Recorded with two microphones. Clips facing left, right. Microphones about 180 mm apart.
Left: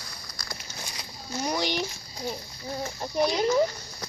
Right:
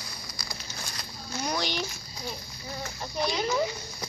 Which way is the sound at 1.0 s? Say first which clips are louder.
Left 3 dB; 10° left (ahead or behind).